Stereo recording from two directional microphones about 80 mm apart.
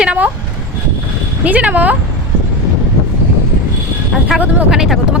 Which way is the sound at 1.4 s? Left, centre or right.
Centre.